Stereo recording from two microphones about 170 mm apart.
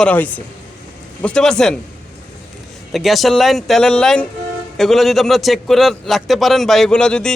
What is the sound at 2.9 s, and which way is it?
A man's voice, centre (ahead or behind).